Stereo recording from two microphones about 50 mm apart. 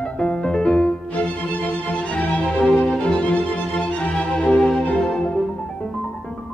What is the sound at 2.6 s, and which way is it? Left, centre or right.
Music, centre.